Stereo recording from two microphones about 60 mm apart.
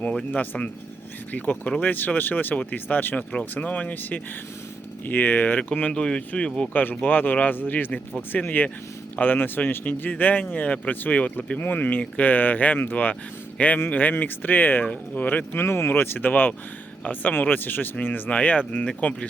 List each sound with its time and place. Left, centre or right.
0.3 s speech: left
7.0 s speech: left
15.6 s speech: left
18.3 s speech: left